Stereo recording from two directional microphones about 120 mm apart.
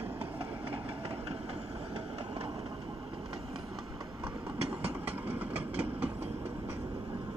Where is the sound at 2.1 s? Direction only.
60° right (ahead or behind).